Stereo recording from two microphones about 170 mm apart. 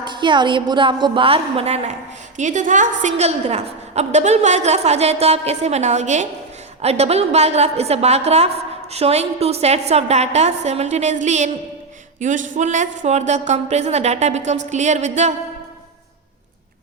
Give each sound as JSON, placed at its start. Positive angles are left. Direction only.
{"t": 0.0, "sound": "a woman's voice", "side_deg": -25}